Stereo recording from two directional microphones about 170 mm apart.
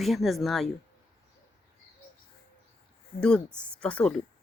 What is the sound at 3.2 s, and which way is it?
Speech, 5° left (ahead or behind).